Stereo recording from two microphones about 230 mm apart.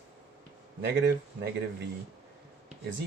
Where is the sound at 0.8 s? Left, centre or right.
Right.